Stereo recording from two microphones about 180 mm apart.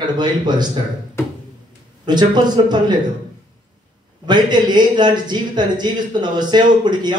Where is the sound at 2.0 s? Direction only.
25° right (ahead or behind).